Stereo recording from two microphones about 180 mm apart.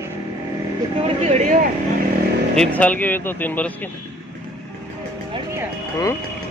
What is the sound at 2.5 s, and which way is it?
Speech, 5° left (ahead or behind).